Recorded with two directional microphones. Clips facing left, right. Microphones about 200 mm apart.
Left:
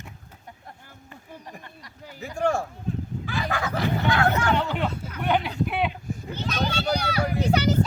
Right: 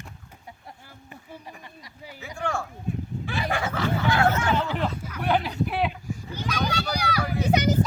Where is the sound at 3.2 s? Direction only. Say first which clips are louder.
Right 1 dB; 25° right (ahead or behind).